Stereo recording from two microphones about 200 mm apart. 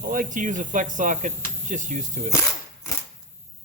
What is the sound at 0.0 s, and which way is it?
Speech, 45° right (ahead or behind).